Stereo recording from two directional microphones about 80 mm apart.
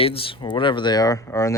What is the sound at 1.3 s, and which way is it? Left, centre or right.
Speech, left.